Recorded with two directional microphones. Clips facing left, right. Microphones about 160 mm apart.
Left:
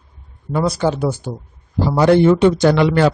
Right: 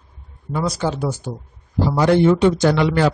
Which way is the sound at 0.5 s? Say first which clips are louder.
Left 4 dB; 55° left (ahead or behind).